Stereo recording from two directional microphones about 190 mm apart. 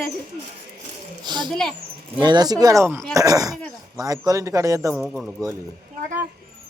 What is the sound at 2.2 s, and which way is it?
Speech, 20° right (ahead or behind).